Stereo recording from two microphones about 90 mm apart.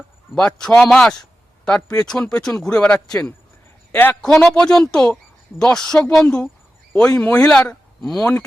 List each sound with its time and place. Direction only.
0.3 s a man's voice: 10° left (ahead or behind)
3.9 s a man's voice: 25° left (ahead or behind)
4.4 s a woman's voice: 5° left (ahead or behind)